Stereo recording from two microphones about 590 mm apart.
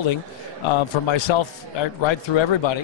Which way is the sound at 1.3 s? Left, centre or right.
Left.